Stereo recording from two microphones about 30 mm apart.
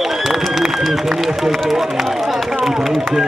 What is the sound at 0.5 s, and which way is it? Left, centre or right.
Run, centre.